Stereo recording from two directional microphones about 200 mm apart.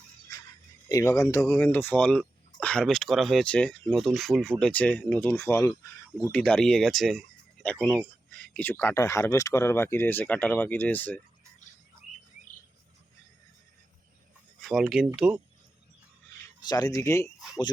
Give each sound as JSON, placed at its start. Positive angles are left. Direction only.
{"t": 0.9, "sound": "speech", "side_deg": 15}
{"t": 14.6, "sound": "speech", "side_deg": 0}
{"t": 16.6, "sound": "speech", "side_deg": 20}